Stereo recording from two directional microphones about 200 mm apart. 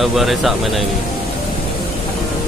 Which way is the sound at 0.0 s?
Centre (ahead or behind).